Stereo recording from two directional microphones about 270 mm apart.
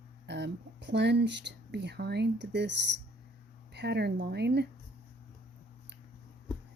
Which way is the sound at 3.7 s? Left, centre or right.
Right.